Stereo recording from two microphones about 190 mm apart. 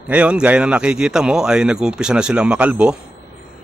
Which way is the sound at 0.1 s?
5° right (ahead or behind).